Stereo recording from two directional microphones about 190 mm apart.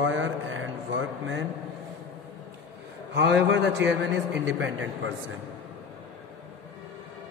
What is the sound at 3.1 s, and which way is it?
Speech, 65° right (ahead or behind).